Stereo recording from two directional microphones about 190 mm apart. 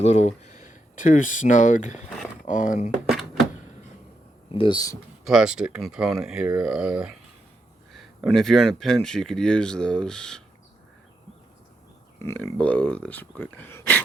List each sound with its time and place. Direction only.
0.0 s speech: 35° left (ahead or behind)
4.5 s speech: 25° left (ahead or behind)
5.2 s speech: 5° right (ahead or behind)
12.2 s speech: 10° left (ahead or behind)